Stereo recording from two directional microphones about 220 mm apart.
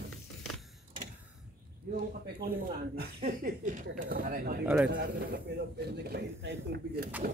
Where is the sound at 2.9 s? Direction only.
40° right (ahead or behind).